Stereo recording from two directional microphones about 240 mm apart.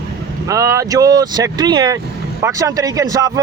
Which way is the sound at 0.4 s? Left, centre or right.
Centre.